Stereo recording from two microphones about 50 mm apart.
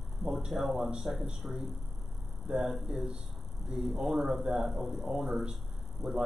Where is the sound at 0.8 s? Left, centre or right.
Centre.